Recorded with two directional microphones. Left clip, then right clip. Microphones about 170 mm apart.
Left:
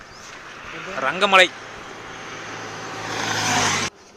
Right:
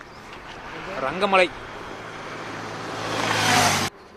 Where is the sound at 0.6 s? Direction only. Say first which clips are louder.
Left 2 dB; 80° right.